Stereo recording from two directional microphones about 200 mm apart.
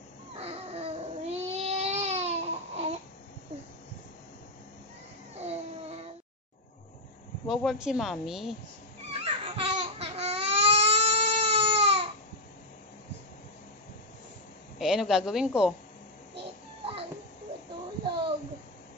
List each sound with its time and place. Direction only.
0.4 s baby cry: 30° right (ahead or behind)
5.4 s a sound: 30° right (ahead or behind)
7.4 s a woman's voice: centre (ahead or behind)
9.1 s baby cry: 30° right (ahead or behind)
14.8 s a woman's voice: centre (ahead or behind)
18.0 s a sound: 25° right (ahead or behind)